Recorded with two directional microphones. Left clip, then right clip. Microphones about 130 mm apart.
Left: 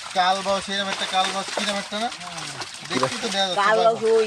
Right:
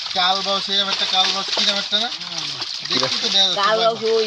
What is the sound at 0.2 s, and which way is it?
Speech, 10° left (ahead or behind).